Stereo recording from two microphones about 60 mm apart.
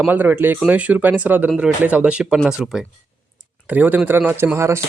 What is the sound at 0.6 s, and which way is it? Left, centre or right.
Speech, right.